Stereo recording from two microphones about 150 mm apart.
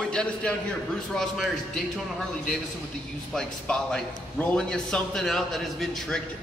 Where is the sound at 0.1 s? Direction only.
5° left (ahead or behind).